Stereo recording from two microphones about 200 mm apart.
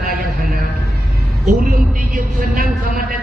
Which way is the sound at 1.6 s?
45° right (ahead or behind).